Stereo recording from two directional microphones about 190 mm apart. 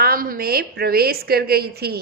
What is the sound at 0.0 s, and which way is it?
A woman's voice, 50° right (ahead or behind).